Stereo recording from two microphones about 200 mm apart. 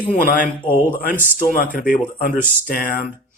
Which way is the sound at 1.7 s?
40° left (ahead or behind).